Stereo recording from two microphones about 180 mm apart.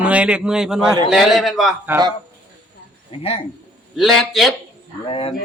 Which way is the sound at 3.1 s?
35° left (ahead or behind).